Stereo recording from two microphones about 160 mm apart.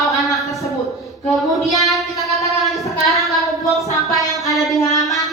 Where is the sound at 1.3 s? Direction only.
Centre (ahead or behind).